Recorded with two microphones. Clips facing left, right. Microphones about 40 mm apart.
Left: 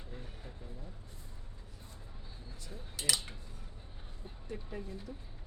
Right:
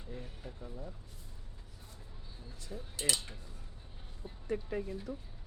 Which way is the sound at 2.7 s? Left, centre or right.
Centre.